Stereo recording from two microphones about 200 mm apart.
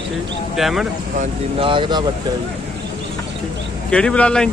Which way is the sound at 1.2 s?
25° right (ahead or behind).